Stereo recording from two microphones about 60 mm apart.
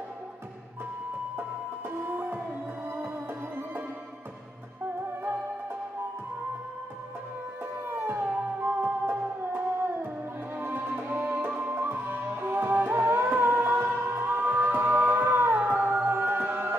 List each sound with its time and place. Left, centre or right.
1.9 s music: right
7.9 s music: right
10.6 s music: right